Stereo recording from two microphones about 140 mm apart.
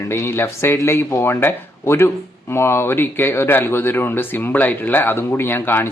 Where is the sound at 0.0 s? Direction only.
20° left (ahead or behind).